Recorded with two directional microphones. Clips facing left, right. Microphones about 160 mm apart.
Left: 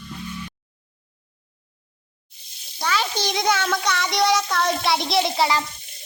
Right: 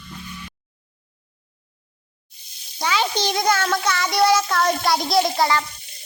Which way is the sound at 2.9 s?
15° right (ahead or behind).